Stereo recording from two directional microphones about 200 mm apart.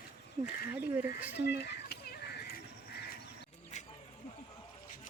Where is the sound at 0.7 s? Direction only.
10° right (ahead or behind).